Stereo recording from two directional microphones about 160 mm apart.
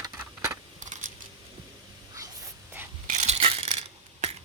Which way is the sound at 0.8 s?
50° right (ahead or behind).